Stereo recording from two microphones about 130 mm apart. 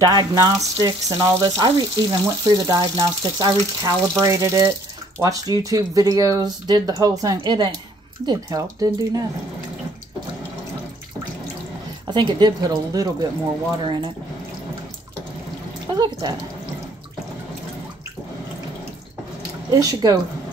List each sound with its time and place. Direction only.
0.0 s speech: 30° right (ahead or behind)
12.1 s speech: 35° right (ahead or behind)
15.9 s speech: 30° right (ahead or behind)
19.7 s speech: 30° right (ahead or behind)